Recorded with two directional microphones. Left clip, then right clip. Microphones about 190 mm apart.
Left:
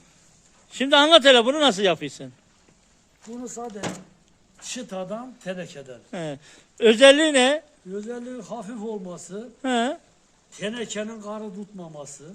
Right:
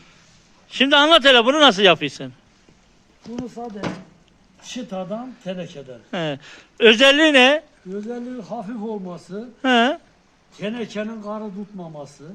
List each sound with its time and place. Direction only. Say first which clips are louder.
0.7 s speech: right 2 dB; 10° left (ahead or behind)
3.6 s speech: even; 25° left (ahead or behind)
4.7 s speech: right 3 dB; 5° left (ahead or behind)
10.6 s a man's voice: right 2 dB; 40° left (ahead or behind)
11.4 s speech: right 4 dB; 10° left (ahead or behind)